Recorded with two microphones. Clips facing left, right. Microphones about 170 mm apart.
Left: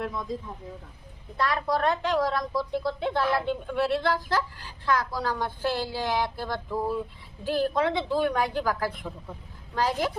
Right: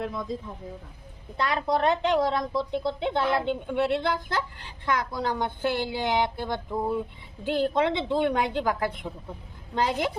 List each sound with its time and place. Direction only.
1.4 s a woman's voice: 25° right (ahead or behind)